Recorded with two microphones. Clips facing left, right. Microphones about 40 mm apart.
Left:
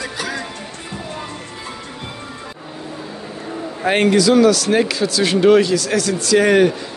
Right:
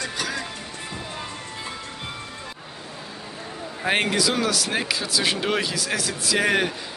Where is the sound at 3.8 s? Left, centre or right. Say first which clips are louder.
Left 8 dB; centre.